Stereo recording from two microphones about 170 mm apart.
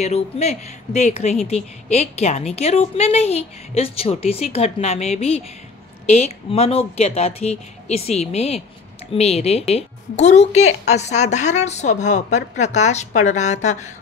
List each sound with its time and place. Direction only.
0.0 s a woman's voice: 40° left (ahead or behind)
6.5 s a woman's voice: 35° left (ahead or behind)